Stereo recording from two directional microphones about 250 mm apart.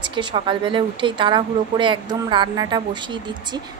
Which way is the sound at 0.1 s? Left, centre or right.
Centre.